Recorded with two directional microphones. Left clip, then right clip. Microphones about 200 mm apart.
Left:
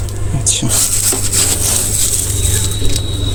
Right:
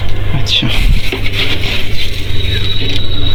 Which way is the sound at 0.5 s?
25° left (ahead or behind).